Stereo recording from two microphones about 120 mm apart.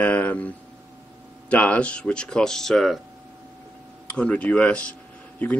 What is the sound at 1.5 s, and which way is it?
Speech, 10° left (ahead or behind).